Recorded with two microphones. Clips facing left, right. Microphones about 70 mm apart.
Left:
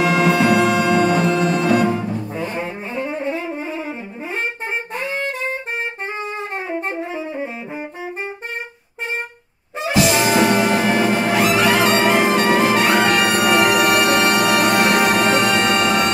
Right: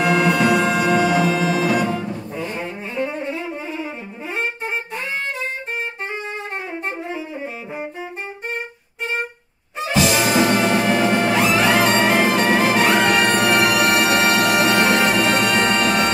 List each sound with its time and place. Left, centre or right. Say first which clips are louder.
0.0 s music: left 1 dB; centre
2.3 s double bass: left 2 dB; left
2.9 s saxophone: right 2 dB; left
3.3 s music: left 3 dB; left
6.9 s saxophone: left 2 dB; left
9.9 s music: left 1 dB; centre